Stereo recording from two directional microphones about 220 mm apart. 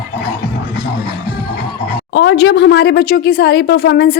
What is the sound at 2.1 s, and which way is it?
Speech, 55° left (ahead or behind).